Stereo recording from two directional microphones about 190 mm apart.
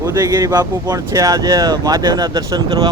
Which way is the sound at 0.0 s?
15° right (ahead or behind).